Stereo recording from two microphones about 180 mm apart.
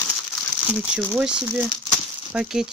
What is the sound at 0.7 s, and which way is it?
Speech, 5° right (ahead or behind).